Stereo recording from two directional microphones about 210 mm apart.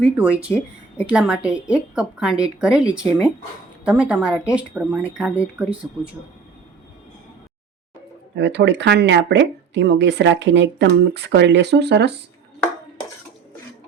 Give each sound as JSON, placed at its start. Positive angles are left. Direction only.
{"t": 0.0, "sound": "a woman's voice", "side_deg": -5}
{"t": 8.4, "sound": "speech", "side_deg": -55}